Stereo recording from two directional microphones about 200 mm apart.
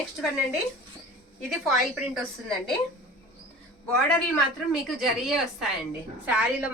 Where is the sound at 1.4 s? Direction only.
Centre (ahead or behind).